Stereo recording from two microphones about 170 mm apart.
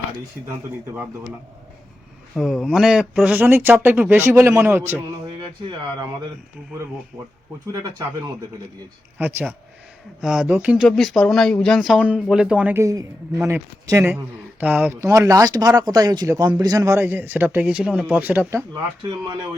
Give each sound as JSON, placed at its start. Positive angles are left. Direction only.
{"t": 2.3, "sound": "speech", "side_deg": 0}
{"t": 5.2, "sound": "a sound", "side_deg": -25}
{"t": 9.1, "sound": "speech", "side_deg": -10}